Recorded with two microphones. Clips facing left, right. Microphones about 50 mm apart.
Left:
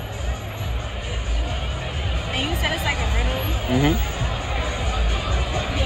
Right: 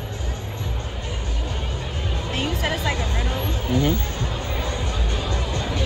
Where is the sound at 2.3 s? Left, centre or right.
Centre.